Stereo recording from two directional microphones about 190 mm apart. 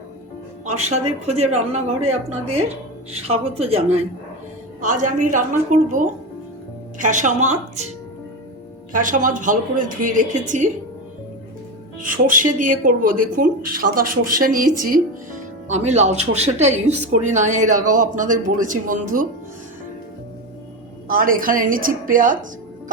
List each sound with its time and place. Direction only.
0.6 s speech: 35° right (ahead or behind)
8.9 s speech: 45° right (ahead or behind)
11.9 s speech: 45° right (ahead or behind)
15.7 s speech: 35° right (ahead or behind)
21.1 s speech: 50° right (ahead or behind)